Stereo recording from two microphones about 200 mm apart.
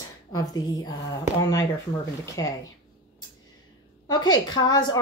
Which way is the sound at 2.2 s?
15° left (ahead or behind).